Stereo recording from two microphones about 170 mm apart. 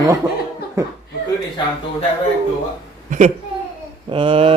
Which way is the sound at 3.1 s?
45° right (ahead or behind).